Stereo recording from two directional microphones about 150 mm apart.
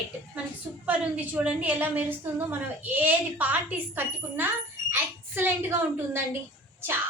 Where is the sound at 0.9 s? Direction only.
10° right (ahead or behind).